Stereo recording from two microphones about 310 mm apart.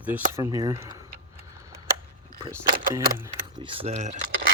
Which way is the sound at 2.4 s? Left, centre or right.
Centre.